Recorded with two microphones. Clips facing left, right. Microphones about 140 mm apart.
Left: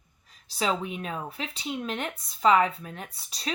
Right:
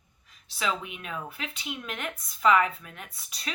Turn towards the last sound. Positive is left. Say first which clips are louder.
# left 4 dB
turn(degrees=30)  # may be behind; listen again after turning